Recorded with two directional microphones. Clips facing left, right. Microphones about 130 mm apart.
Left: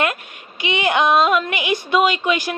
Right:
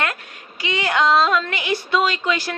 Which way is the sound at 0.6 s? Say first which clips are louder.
Left 2 dB; 20° left (ahead or behind).